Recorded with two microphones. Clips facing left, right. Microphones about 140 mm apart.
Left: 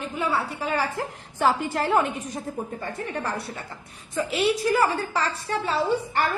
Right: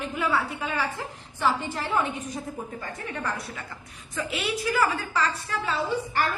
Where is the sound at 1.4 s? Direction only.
45° left (ahead or behind).